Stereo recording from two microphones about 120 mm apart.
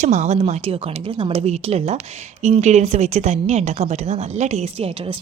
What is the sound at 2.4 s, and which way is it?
Speech, 75° right (ahead or behind).